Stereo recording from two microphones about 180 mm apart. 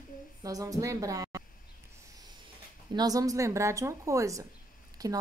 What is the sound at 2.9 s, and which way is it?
A woman's voice, 20° right (ahead or behind).